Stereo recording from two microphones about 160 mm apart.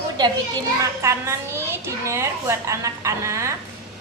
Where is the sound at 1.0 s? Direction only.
15° right (ahead or behind).